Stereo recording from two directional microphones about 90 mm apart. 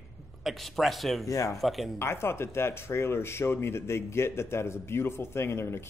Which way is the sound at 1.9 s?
30° left (ahead or behind).